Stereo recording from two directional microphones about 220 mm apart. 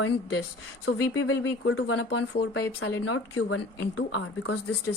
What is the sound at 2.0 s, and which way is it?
Speech, 50° left (ahead or behind).